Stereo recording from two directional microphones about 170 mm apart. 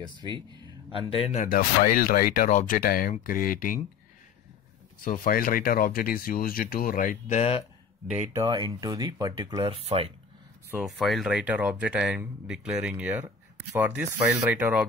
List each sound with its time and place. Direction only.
0.9 s speech: 30° left (ahead or behind)
1.4 s speech: 60° left (ahead or behind)
5.0 s speech: 55° left (ahead or behind); by 7.6 s 40° left (ahead or behind)
8.4 s speech: 25° right (ahead or behind)
10.8 s speech: centre (ahead or behind)